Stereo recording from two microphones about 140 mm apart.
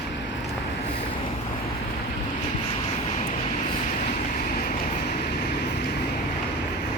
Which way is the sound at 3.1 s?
50° left (ahead or behind).